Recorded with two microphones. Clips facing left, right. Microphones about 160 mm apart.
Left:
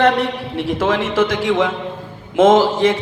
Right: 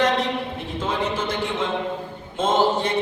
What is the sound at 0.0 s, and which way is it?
A man's voice, 75° left (ahead or behind).